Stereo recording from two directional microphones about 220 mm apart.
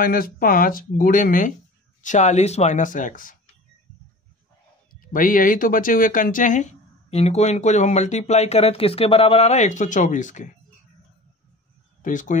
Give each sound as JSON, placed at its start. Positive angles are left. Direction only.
{"t": 0.0, "sound": "speech", "side_deg": 40}
{"t": 5.0, "sound": "speech", "side_deg": 40}
{"t": 12.0, "sound": "speech", "side_deg": 35}